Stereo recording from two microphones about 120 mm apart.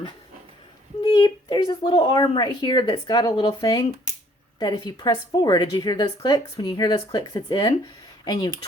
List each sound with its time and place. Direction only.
1.0 s a woman's voice: 35° left (ahead or behind)